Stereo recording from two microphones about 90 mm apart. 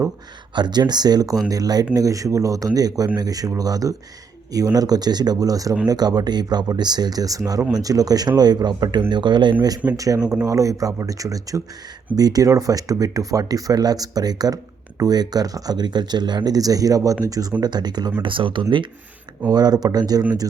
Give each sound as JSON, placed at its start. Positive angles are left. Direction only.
{"t": 0.5, "sound": "speech", "side_deg": -55}
{"t": 10.4, "sound": "speech", "side_deg": -40}
{"t": 18.2, "sound": "speech", "side_deg": -70}
{"t": 19.5, "sound": "speech", "side_deg": -50}